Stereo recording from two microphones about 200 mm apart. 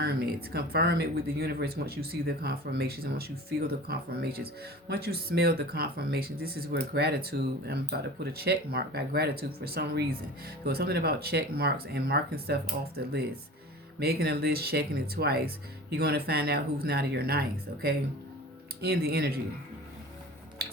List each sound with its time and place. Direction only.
0.0 s speech: 50° right (ahead or behind)